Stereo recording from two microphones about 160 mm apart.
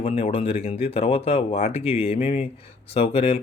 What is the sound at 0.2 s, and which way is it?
Speech, 35° left (ahead or behind).